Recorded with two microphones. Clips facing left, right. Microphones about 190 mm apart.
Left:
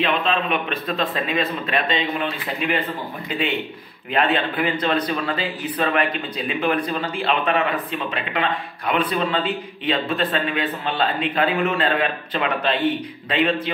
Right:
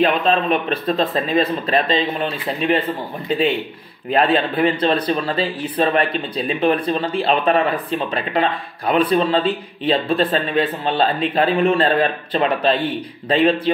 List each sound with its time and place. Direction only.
0.0 s speech: 40° right (ahead or behind)